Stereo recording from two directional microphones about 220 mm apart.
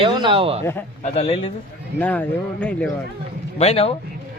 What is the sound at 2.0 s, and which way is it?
Speech, 5° left (ahead or behind).